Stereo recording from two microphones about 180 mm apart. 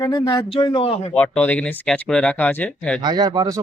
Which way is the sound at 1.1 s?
10° left (ahead or behind).